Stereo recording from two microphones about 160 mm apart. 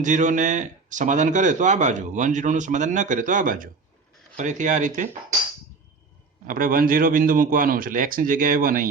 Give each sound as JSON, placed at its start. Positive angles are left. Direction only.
{"t": 0.0, "sound": "speech", "side_deg": -50}
{"t": 6.5, "sound": "speech", "side_deg": -60}